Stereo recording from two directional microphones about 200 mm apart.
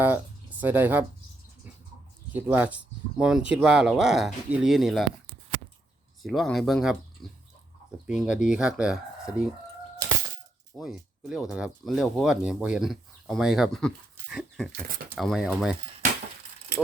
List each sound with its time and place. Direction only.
0.0 s speech: 10° right (ahead or behind)
2.3 s speech: 10° right (ahead or behind)
6.2 s speech: centre (ahead or behind)
8.0 s speech: 5° right (ahead or behind)
10.8 s speech: centre (ahead or behind)
16.7 s a sound: 55° right (ahead or behind)